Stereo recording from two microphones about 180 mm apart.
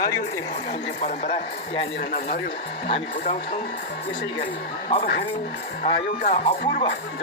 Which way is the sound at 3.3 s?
35° left (ahead or behind).